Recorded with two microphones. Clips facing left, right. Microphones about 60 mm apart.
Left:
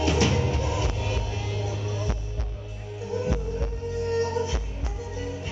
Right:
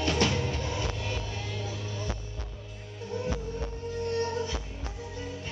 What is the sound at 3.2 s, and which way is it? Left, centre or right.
Music, left.